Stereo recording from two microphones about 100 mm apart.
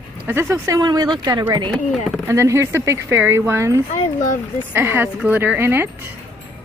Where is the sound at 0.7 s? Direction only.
40° right (ahead or behind).